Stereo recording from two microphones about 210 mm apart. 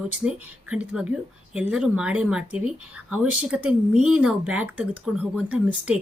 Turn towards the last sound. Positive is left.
turn(degrees=-5)  # may be behind; listen again after turning